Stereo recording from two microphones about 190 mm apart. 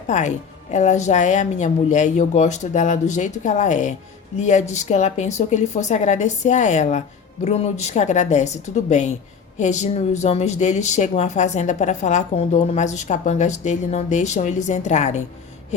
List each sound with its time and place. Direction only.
0.1 s speech: 40° left (ahead or behind)